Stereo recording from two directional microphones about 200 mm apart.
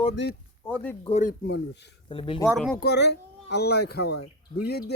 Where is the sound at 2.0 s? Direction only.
25° left (ahead or behind).